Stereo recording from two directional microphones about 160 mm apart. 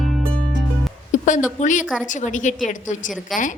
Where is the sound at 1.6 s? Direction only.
50° left (ahead or behind).